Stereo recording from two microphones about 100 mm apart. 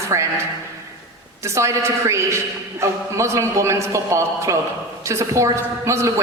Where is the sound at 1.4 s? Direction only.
30° right (ahead or behind).